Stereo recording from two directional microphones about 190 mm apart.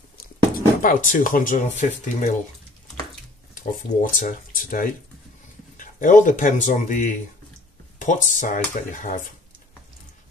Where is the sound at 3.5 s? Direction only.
45° left (ahead or behind).